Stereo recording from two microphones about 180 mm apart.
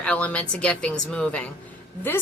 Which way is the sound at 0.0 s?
5° left (ahead or behind).